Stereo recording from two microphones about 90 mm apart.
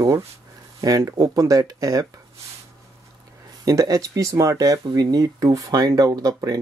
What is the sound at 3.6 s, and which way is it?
Speech, 40° right (ahead or behind).